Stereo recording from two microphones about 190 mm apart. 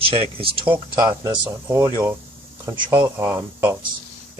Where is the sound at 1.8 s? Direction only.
20° right (ahead or behind).